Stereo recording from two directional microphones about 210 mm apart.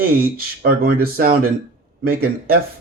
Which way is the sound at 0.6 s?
45° right (ahead or behind).